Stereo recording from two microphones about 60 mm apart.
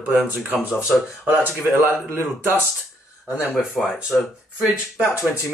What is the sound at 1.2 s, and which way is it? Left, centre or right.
Speech, right.